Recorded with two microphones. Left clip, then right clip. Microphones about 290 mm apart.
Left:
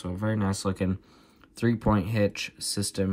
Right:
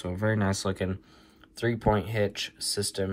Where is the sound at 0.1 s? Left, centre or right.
Centre.